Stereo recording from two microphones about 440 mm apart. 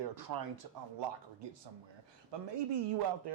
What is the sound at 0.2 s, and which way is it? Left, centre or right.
A man's voice, right.